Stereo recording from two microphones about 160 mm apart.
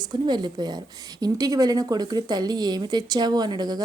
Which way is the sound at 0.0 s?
25° right (ahead or behind).